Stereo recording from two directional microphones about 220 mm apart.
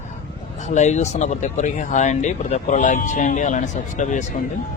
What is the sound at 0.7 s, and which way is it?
Speech, 30° left (ahead or behind).